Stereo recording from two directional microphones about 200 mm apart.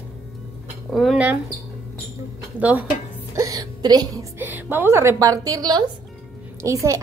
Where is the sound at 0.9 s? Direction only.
Centre (ahead or behind).